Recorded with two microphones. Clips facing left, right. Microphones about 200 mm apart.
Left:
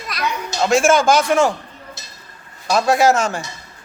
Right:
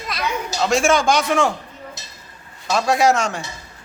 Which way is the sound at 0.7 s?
Centre (ahead or behind).